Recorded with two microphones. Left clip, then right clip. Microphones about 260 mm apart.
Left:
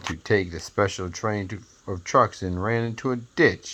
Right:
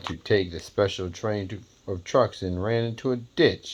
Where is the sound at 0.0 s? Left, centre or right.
Left.